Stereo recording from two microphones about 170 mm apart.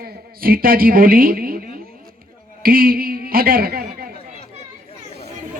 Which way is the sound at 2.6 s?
60° right (ahead or behind).